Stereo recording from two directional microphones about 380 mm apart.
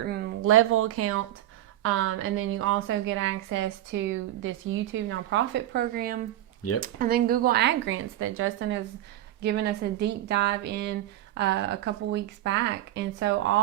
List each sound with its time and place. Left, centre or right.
0.0 s a woman's voice: right